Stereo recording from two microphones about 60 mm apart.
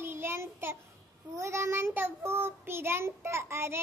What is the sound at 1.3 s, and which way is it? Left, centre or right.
Child singing, right.